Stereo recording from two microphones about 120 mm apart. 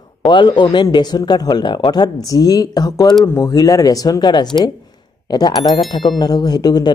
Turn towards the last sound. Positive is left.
turn(degrees=35)  # may be behind; listen again after turning